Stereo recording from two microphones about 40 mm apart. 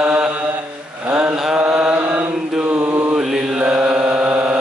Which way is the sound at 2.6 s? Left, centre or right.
Right.